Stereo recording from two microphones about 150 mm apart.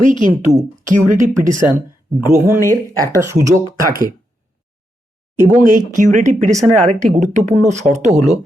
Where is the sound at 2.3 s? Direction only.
15° right (ahead or behind).